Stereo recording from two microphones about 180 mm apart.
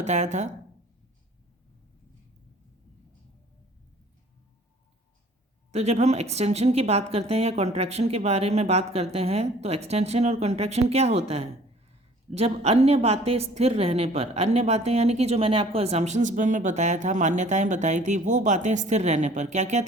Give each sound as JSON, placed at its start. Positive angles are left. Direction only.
{"t": 0.0, "sound": "a woman's voice", "side_deg": -40}
{"t": 5.7, "sound": "a woman's voice", "side_deg": -35}